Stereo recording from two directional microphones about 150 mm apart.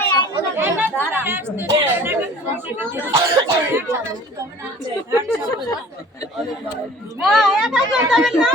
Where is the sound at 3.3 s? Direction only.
20° right (ahead or behind).